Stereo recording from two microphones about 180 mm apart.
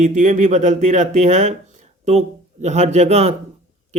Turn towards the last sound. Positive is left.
turn(degrees=-35)  # may be behind; listen again after turning